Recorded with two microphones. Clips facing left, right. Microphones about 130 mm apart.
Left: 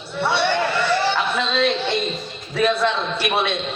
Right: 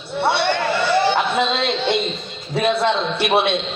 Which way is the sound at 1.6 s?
60° right (ahead or behind).